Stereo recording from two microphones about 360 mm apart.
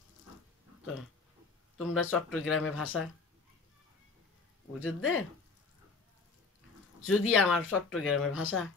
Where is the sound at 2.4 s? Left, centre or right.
Left.